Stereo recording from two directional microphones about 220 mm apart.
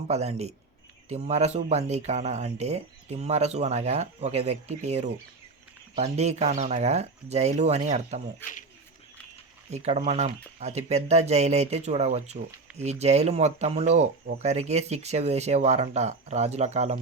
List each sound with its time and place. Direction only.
0.1 s speech: 30° right (ahead or behind)
8.4 s speech: 10° left (ahead or behind)
9.6 s speech: 30° right (ahead or behind)